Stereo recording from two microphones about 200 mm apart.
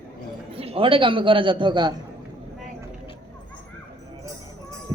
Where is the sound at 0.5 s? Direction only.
30° right (ahead or behind).